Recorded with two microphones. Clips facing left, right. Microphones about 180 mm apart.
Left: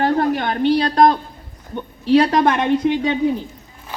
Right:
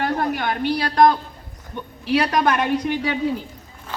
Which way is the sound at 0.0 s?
30° left (ahead or behind).